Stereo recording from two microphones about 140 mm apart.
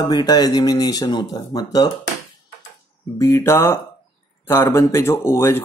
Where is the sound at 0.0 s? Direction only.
30° left (ahead or behind).